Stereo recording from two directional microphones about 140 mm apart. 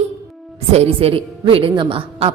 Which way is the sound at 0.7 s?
45° right (ahead or behind).